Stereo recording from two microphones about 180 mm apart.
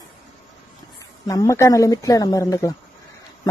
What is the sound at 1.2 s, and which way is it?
A woman's voice, 20° left (ahead or behind).